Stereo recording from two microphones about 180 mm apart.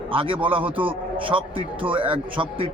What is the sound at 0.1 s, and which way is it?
A man's voice, 30° right (ahead or behind).